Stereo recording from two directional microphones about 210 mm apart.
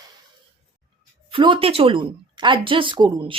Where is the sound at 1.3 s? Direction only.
25° right (ahead or behind).